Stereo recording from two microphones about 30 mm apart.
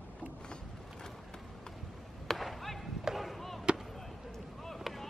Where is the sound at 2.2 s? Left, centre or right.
Centre.